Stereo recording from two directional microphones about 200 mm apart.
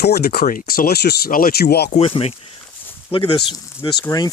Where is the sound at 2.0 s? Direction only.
30° left (ahead or behind).